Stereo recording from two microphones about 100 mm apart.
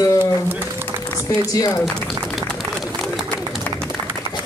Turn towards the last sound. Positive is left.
turn(degrees=0)  # may be behind; listen again after turning